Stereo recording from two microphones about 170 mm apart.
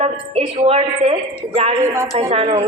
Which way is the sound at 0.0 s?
35° right (ahead or behind).